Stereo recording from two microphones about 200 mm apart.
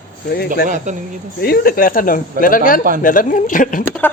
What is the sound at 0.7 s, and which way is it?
Speech, 40° right (ahead or behind).